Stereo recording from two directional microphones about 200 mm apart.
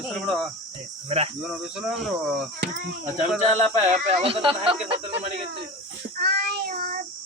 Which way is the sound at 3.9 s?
30° right (ahead or behind).